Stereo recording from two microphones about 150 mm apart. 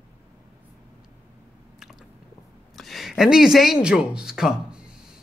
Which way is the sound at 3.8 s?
5° right (ahead or behind).